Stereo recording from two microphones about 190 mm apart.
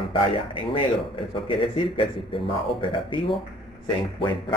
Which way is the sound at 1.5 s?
25° left (ahead or behind).